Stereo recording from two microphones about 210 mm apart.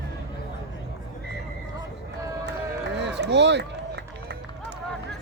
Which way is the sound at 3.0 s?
55° right (ahead or behind).